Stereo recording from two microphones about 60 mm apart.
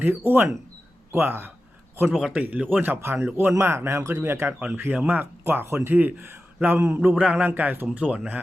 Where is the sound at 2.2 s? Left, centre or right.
Right.